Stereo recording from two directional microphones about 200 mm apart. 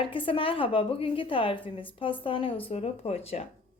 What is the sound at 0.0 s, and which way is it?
A woman's voice, 25° left (ahead or behind).